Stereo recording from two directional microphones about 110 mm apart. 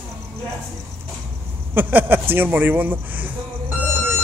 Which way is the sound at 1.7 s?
20° right (ahead or behind).